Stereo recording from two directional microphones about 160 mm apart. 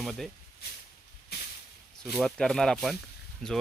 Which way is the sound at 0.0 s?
Centre (ahead or behind).